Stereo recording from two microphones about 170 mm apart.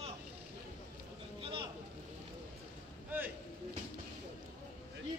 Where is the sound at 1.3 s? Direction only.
30° right (ahead or behind).